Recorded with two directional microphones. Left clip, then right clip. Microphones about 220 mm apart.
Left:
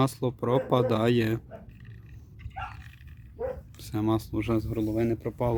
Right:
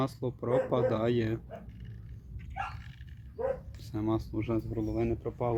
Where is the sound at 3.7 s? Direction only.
35° left (ahead or behind).